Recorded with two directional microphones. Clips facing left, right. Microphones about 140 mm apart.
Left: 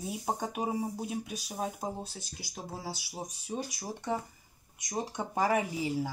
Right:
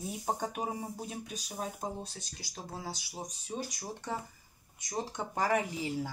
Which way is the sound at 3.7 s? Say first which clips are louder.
Left 4 dB; 10° left (ahead or behind).